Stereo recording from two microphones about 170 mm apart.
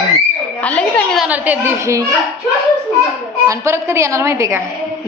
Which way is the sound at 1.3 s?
10° right (ahead or behind).